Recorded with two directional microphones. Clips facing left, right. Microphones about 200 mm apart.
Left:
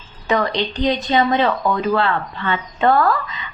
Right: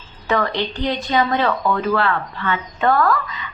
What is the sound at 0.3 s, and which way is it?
Speech, 20° left (ahead or behind).